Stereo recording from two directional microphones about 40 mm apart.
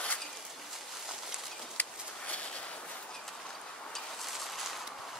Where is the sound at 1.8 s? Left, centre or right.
Left.